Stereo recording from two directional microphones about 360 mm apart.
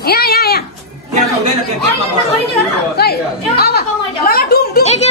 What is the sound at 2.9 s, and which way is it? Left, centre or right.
Chatter, left.